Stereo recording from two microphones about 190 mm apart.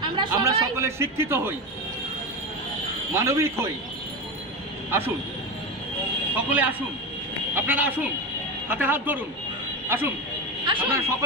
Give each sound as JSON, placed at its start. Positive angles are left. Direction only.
{"t": 0.3, "sound": "speech", "side_deg": -15}
{"t": 3.2, "sound": "speech", "side_deg": -15}
{"t": 6.3, "sound": "speech", "side_deg": -10}
{"t": 10.7, "sound": "speech", "side_deg": -25}
{"t": 11.0, "sound": "speech", "side_deg": -15}